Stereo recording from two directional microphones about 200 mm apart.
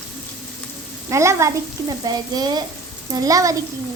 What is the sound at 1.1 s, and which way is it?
Speech, 15° right (ahead or behind).